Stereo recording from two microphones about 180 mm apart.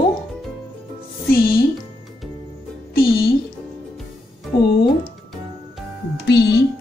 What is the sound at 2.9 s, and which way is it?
Music, 60° left (ahead or behind).